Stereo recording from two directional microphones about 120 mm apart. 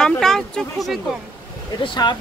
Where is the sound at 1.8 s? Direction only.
40° left (ahead or behind).